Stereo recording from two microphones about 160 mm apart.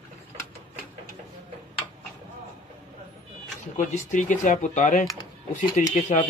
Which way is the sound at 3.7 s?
50° left (ahead or behind).